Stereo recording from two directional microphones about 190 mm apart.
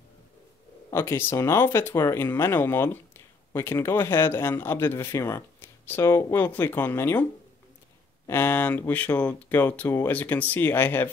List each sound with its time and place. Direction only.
0.8 s speech: 15° left (ahead or behind)
8.3 s speech: 10° left (ahead or behind)